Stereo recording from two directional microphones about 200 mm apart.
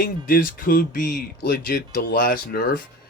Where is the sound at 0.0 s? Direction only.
45° left (ahead or behind).